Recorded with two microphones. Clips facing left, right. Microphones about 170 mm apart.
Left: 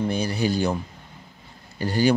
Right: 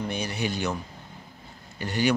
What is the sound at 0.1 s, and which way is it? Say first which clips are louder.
Speech: left 6 dB; 35° left (ahead or behind).